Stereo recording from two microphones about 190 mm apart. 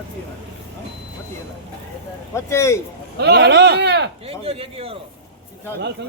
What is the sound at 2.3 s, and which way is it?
Speech, 15° left (ahead or behind).